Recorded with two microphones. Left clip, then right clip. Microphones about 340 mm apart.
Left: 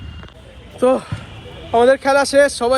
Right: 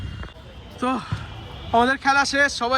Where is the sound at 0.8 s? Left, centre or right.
Centre.